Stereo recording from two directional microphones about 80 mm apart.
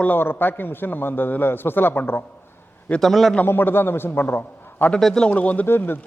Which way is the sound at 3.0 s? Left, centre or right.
Centre.